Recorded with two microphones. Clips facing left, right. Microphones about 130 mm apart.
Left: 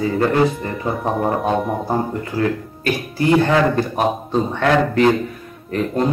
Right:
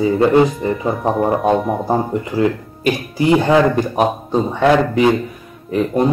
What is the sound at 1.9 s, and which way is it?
Speech, 15° right (ahead or behind).